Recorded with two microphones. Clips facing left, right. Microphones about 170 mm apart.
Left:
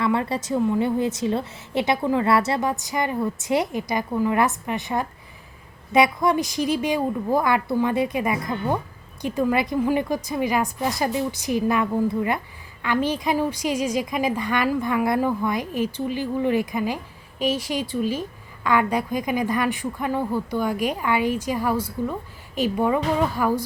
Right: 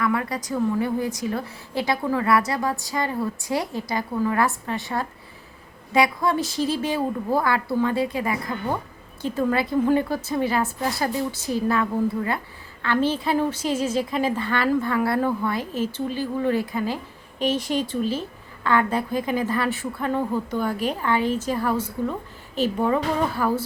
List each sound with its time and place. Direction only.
0.0 s a woman's voice: 25° left (ahead or behind)